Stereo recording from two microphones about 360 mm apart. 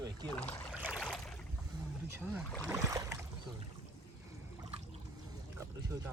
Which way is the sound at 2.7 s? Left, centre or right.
Centre.